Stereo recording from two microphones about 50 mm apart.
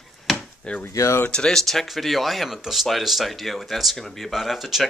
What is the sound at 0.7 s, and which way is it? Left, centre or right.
Speech, left.